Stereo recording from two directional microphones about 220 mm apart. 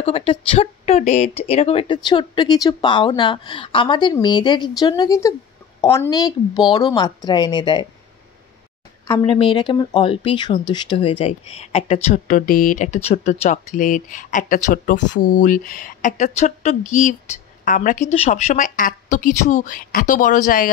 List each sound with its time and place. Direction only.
0.0 s a woman's voice: 25° left (ahead or behind)
9.2 s a woman's voice: 25° left (ahead or behind)